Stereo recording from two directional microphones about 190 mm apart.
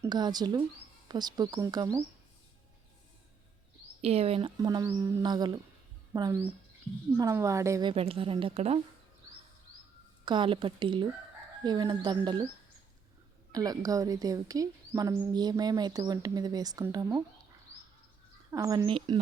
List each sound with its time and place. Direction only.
0.0 s speech: 20° right (ahead or behind)
4.0 s speech: 30° right (ahead or behind)
10.2 s speech: 25° right (ahead or behind)
13.5 s speech: 20° right (ahead or behind)
18.5 s speech: 15° right (ahead or behind)
18.9 s speech: 25° right (ahead or behind)